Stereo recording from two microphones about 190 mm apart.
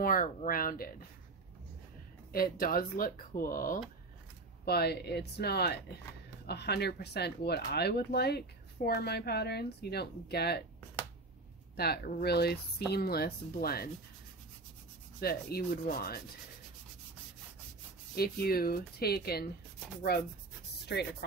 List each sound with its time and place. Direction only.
0.0 s speech: 45° left (ahead or behind)
2.3 s speech: 50° left (ahead or behind)
4.6 s speech: 55° left (ahead or behind)
11.7 s speech: 55° left (ahead or behind)
15.1 s speech: 55° left (ahead or behind)
18.1 s speech: 55° left (ahead or behind)